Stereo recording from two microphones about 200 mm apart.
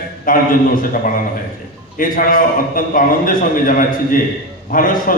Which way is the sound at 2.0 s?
45° left (ahead or behind).